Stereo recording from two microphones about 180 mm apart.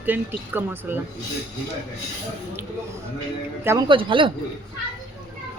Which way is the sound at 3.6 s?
15° right (ahead or behind).